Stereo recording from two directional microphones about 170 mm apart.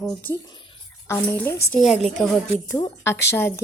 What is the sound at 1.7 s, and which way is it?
Speech, centre (ahead or behind).